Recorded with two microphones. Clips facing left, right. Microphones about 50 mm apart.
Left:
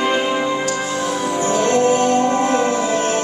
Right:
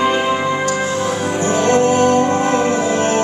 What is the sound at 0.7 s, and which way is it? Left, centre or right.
Music, right.